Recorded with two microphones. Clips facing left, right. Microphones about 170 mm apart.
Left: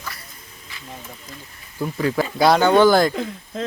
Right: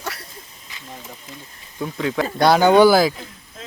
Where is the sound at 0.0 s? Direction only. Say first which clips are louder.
Right 5 dB; 75° right (ahead or behind).